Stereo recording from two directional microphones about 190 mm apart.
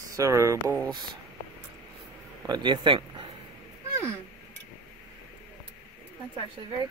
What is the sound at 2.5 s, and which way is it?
Speech, 25° right (ahead or behind).